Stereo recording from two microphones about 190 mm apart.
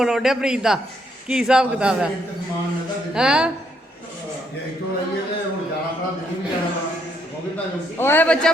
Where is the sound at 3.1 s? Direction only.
5° right (ahead or behind).